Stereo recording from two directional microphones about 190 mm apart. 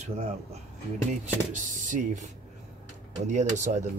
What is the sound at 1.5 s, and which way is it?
Speech, 40° right (ahead or behind).